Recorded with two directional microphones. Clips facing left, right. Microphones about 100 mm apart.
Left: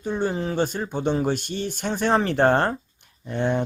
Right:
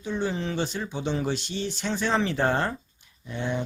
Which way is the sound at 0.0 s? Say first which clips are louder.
Left 4 dB; 50° left (ahead or behind).